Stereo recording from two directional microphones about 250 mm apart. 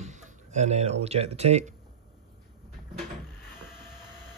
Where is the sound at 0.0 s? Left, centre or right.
Right.